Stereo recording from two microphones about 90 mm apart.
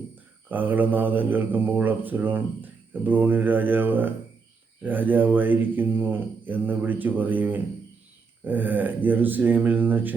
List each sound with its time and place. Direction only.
0.4 s speech: 20° right (ahead or behind)